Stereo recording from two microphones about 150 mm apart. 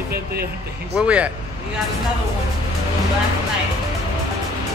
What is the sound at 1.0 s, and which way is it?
Speech, 10° right (ahead or behind).